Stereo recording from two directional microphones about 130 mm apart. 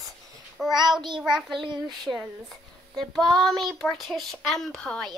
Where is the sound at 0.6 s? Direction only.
Centre (ahead or behind).